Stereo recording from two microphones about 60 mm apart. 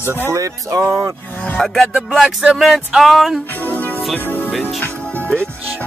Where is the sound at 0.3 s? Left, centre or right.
Right.